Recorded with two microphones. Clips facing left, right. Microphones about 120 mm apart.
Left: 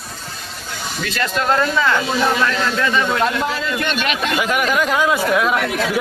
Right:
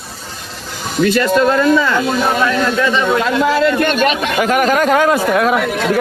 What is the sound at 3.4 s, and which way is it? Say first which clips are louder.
Speech: right 10 dB; 90° right.